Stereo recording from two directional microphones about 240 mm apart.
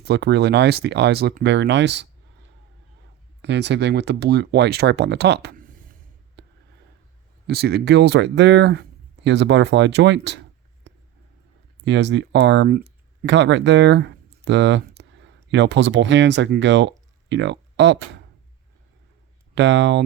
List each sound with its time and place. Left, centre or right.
0.0 s speech: right
3.4 s speech: right
7.4 s speech: right
10.9 s a sound: right
11.8 s speech: right
19.5 s speech: right